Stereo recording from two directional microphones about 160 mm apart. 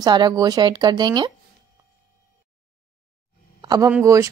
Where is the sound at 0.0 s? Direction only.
25° right (ahead or behind).